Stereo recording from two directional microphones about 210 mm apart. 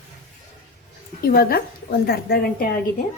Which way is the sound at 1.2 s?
45° left (ahead or behind).